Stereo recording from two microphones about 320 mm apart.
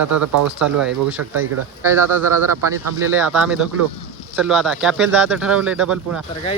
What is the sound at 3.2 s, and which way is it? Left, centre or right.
Speech, centre.